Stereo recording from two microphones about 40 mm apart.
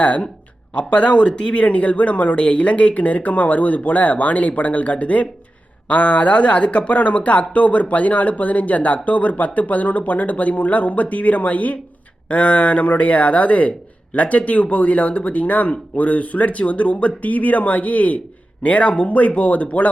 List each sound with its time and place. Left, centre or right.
0.7 s speech: left